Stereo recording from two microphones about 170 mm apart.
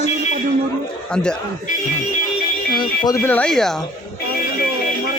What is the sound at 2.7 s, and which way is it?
Music, 25° left (ahead or behind).